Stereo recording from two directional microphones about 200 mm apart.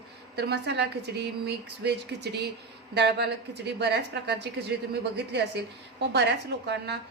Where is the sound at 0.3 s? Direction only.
55° right (ahead or behind).